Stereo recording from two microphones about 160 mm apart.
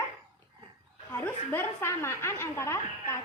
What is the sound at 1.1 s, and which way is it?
A woman's voice, 15° left (ahead or behind).